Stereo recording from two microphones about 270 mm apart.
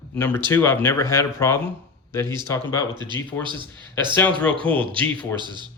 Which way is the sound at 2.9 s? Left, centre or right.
Centre.